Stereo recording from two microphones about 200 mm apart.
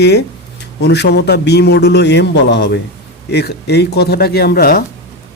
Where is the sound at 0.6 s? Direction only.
55° left (ahead or behind).